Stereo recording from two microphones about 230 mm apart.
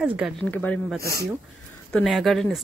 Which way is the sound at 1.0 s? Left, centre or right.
Right.